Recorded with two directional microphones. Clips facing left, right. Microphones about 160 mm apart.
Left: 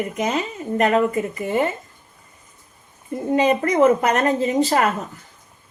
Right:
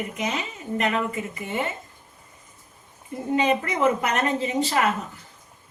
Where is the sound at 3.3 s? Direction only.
40° left (ahead or behind).